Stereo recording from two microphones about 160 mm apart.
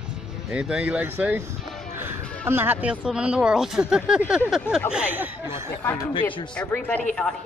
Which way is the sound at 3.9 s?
5° right (ahead or behind).